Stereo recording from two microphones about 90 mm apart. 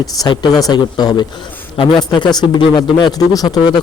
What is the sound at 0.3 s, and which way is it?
Speech, 50° left (ahead or behind).